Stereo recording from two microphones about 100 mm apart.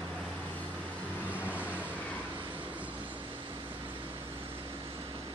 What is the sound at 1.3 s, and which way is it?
Vehicle, 15° right (ahead or behind).